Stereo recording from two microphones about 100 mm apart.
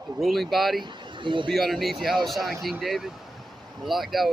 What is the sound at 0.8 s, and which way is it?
Speech, 55° right (ahead or behind).